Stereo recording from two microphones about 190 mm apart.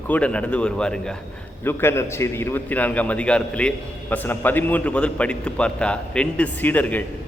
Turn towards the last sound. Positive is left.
turn(degrees=10)  # may be behind; listen again after turning